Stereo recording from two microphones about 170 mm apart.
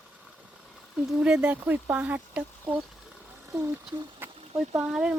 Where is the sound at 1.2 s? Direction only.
5° right (ahead or behind).